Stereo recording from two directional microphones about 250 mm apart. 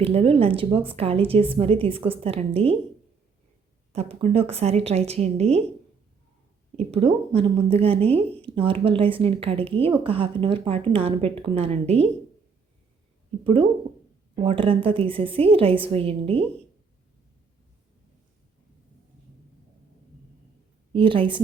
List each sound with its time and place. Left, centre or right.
0.0 s a woman's voice: right
3.9 s a woman's voice: right
6.7 s a woman's voice: right
13.4 s a woman's voice: right
20.9 s a woman's voice: centre